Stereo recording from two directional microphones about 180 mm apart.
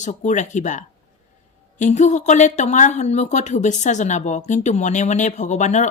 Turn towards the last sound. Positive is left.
turn(degrees=40)  # may be behind; listen again after turning